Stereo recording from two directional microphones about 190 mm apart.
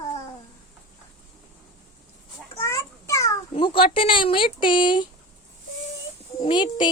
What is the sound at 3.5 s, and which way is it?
Speech, 25° left (ahead or behind).